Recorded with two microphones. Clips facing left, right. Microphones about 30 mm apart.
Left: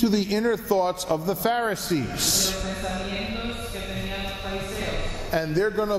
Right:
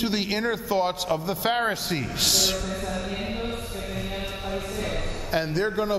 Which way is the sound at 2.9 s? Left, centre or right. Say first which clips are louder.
Even; centre.